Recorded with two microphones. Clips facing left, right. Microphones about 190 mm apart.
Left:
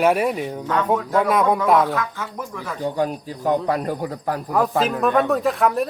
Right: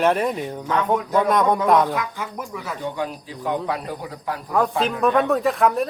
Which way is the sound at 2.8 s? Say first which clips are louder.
Left 7 dB; 40° left (ahead or behind).